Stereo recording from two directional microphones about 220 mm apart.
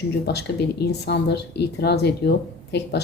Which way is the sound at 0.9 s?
50° left (ahead or behind).